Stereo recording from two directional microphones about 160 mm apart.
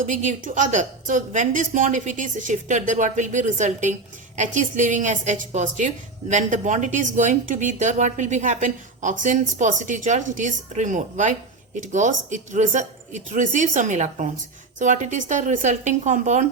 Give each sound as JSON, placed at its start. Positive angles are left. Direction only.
{"t": 0.1, "sound": "a woman's voice", "side_deg": -50}